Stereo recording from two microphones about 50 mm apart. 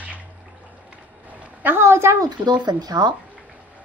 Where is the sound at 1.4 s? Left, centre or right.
Right.